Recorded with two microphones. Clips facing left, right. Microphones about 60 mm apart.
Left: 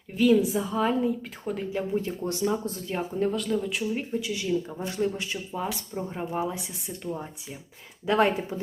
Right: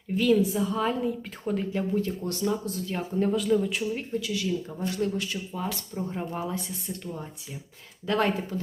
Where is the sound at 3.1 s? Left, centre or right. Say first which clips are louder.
Right 4 dB; centre.